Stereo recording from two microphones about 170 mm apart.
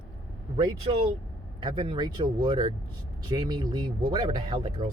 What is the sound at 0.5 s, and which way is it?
Speech, 30° right (ahead or behind).